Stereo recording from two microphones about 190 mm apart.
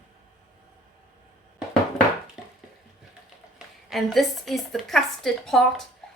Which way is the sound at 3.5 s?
Centre (ahead or behind).